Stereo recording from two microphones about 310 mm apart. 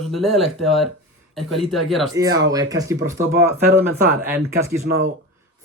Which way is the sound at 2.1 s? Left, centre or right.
Centre.